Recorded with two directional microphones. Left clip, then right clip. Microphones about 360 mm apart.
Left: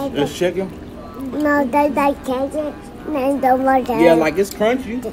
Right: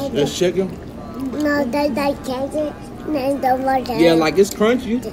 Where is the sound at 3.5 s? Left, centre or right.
Left.